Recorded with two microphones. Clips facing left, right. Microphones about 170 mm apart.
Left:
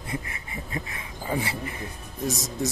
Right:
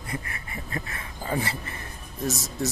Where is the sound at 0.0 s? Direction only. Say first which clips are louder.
Left 1 dB; 20° left (ahead or behind).